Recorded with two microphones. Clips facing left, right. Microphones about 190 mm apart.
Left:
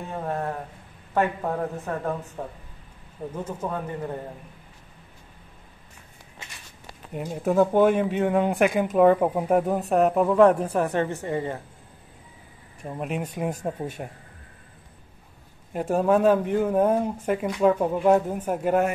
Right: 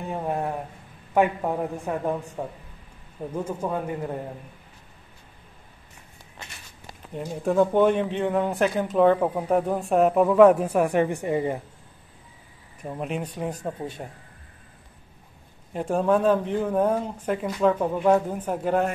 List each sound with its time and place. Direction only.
0.1 s a man's voice: 15° right (ahead or behind)
7.2 s speech: 5° left (ahead or behind); by 11.6 s 15° right (ahead or behind)
12.8 s speech: centre (ahead or behind)
15.7 s speech: 5° left (ahead or behind)